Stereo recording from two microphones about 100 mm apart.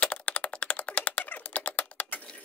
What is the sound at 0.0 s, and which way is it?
Typing, 15° left (ahead or behind).